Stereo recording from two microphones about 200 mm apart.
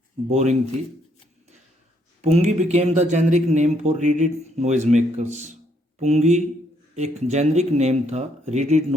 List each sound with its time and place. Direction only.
0.3 s speech: 35° right (ahead or behind)
2.2 s speech: 35° right (ahead or behind)